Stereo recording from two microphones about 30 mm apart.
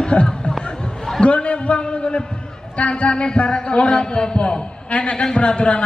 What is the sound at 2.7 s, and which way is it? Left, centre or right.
A man's voice, left.